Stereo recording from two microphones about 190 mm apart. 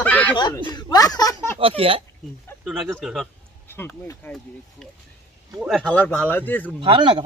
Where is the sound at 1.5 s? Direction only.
30° right (ahead or behind).